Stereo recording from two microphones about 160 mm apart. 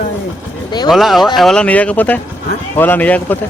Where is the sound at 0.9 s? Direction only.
Centre (ahead or behind).